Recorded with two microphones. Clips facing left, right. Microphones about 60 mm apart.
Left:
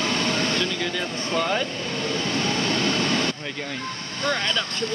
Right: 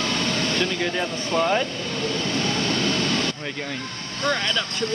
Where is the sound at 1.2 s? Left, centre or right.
Centre.